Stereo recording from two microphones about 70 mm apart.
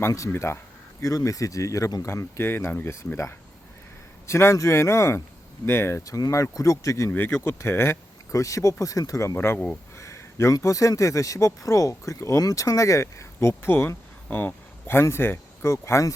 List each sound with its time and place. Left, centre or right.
0.3 s speech: left
1.0 s speech: left
2.0 s speech: left
4.3 s speech: left